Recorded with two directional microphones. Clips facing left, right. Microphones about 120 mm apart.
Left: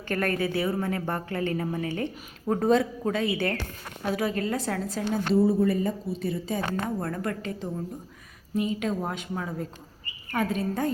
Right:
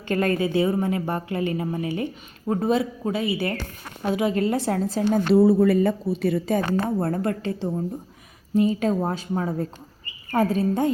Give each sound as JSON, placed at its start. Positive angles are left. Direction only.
{"t": 0.1, "sound": "a woman's voice", "side_deg": -20}
{"t": 4.0, "sound": "a woman's voice", "side_deg": -25}
{"t": 5.3, "sound": "a woman's voice", "side_deg": -75}
{"t": 6.7, "sound": "a woman's voice", "side_deg": -30}